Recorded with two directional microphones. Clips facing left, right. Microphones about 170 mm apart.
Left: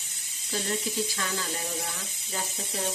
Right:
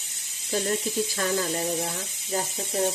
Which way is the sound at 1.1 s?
45° right (ahead or behind).